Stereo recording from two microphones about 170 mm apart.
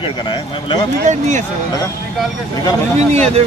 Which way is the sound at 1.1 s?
45° right (ahead or behind).